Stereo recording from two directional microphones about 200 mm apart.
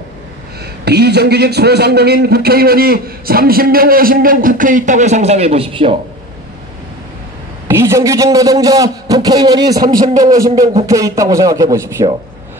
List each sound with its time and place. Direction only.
0.8 s a man's voice: 55° right (ahead or behind); by 5.9 s 25° right (ahead or behind)
7.6 s a man's voice: 15° right (ahead or behind)